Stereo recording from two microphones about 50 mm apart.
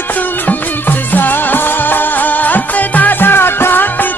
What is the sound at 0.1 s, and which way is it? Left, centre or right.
Music, left.